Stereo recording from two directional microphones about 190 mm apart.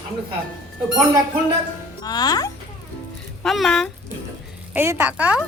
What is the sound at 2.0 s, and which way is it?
Speech, 20° left (ahead or behind).